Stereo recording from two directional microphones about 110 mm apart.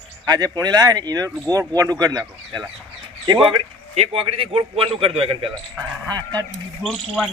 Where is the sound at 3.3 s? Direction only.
50° right (ahead or behind).